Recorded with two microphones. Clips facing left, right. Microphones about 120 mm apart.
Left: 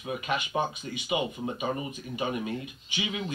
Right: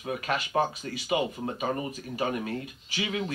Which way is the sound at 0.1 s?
10° left (ahead or behind).